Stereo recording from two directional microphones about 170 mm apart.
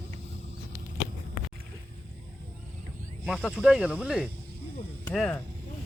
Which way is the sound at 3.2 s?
5° right (ahead or behind).